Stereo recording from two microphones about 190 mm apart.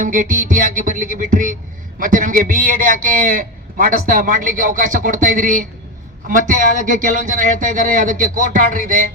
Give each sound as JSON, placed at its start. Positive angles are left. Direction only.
{"t": 0.0, "sound": "a man's voice", "side_deg": -45}